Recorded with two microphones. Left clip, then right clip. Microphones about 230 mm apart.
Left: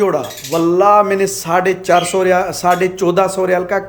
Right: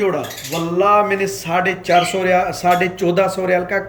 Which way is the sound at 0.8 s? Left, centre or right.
Left.